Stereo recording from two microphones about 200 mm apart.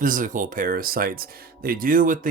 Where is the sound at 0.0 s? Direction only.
40° right (ahead or behind).